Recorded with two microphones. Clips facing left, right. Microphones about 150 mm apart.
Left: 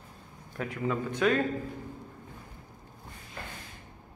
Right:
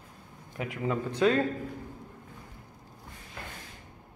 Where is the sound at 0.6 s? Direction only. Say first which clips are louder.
Even; 20° right (ahead or behind).